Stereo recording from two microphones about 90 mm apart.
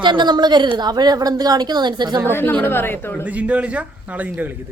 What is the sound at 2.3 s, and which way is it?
Speech, 20° left (ahead or behind).